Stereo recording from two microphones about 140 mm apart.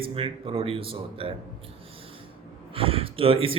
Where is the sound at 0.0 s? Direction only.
40° right (ahead or behind).